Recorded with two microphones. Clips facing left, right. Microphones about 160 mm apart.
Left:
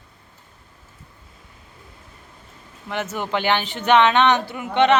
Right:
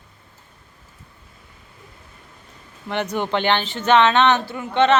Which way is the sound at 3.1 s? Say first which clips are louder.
Right 1 dB; 5° left (ahead or behind).